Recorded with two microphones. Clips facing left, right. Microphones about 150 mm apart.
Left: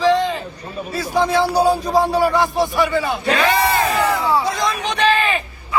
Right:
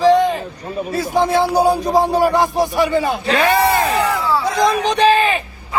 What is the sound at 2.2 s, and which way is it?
Speech, 45° right (ahead or behind).